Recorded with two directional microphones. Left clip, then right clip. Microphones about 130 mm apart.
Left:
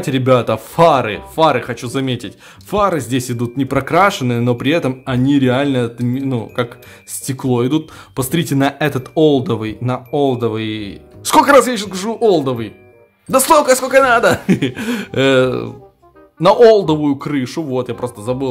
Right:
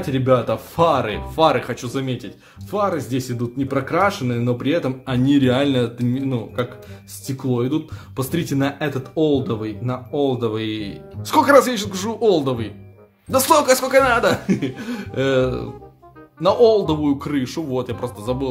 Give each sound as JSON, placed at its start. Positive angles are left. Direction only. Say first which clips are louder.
{"t": 0.0, "sound": "speech", "louder": "left 4 dB", "side_deg": 35}
{"t": 2.0, "sound": "speech", "louder": "left 6 dB", "side_deg": 40}
{"t": 7.2, "sound": "speech", "louder": "left 6 dB", "side_deg": 40}
{"t": 14.4, "sound": "speech", "louder": "left 6 dB", "side_deg": 45}
{"t": 16.6, "sound": "speech", "louder": "left 5 dB", "side_deg": 25}